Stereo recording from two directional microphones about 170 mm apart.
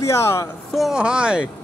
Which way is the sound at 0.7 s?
5° right (ahead or behind).